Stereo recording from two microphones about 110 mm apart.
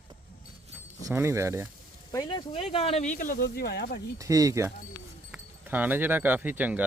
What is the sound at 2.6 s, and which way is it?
Speech, 65° left (ahead or behind).